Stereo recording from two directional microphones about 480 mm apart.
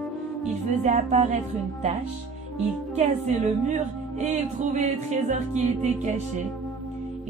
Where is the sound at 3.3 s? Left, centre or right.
Centre.